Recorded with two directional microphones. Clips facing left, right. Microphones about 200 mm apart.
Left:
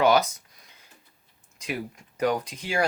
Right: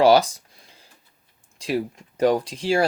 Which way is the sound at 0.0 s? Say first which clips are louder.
Right 5 dB; 30° right (ahead or behind).